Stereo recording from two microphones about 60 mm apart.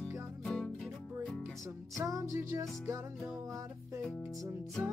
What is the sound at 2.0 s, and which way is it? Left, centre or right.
Music, right.